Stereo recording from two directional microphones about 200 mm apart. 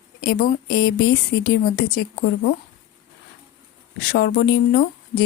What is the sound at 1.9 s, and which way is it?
Speech, 50° left (ahead or behind).